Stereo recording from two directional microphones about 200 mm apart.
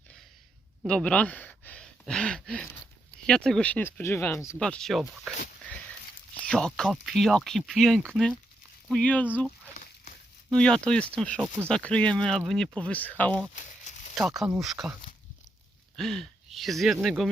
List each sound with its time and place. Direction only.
0.8 s speech: 5° left (ahead or behind)
6.5 s speech: 5° left (ahead or behind)
9.7 s a sound: 40° left (ahead or behind)
10.5 s speech: 5° left (ahead or behind)
16.0 s speech: centre (ahead or behind)